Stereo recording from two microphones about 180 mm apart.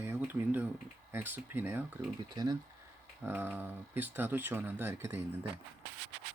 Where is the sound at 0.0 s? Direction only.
10° right (ahead or behind).